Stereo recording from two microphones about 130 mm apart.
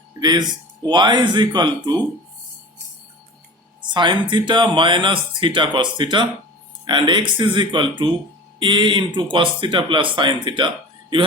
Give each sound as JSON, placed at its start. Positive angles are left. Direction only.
{"t": 0.2, "sound": "speech", "side_deg": -35}
{"t": 3.9, "sound": "speech", "side_deg": -35}